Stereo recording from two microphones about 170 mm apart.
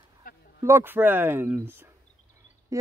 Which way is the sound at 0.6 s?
15° right (ahead or behind).